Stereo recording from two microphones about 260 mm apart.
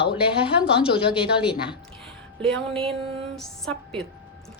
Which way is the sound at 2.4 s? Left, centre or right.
Centre.